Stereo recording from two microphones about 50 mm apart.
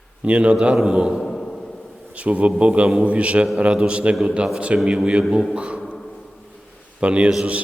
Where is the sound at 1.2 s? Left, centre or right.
Centre.